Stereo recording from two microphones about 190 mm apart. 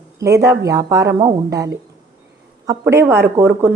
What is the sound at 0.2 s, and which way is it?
A woman's voice, 15° right (ahead or behind).